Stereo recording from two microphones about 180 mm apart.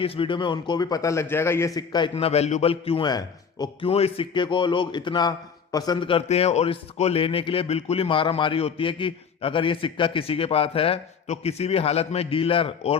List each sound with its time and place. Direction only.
0.0 s a man's voice: 30° left (ahead or behind)
2.1 s a man's voice: 35° left (ahead or behind)